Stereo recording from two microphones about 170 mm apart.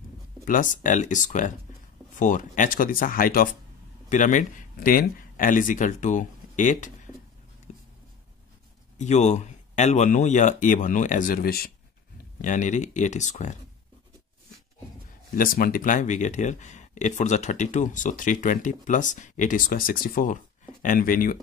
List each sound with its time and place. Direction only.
0.5 s speech: 50° left (ahead or behind)
7.7 s a sound: 45° left (ahead or behind)
8.9 s speech: 45° left (ahead or behind); by 11.7 s 60° left (ahead or behind)
12.4 s speech: 45° left (ahead or behind)
15.3 s speech: 55° left (ahead or behind)